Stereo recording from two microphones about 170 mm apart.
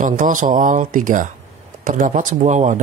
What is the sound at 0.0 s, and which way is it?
Speech, 50° right (ahead or behind).